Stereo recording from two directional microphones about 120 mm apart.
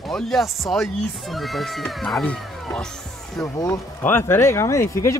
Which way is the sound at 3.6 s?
20° left (ahead or behind).